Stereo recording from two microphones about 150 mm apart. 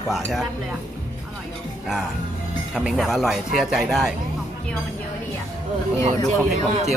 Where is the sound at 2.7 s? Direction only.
Centre (ahead or behind).